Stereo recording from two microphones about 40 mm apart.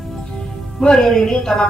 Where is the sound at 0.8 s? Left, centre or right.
Centre.